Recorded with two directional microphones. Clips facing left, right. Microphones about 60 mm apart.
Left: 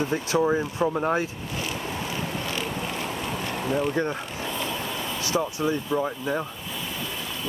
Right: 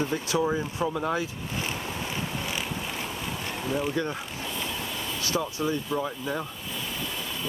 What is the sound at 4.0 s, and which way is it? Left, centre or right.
Speech, left.